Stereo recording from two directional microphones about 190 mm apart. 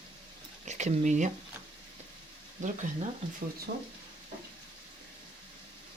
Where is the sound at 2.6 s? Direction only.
40° right (ahead or behind).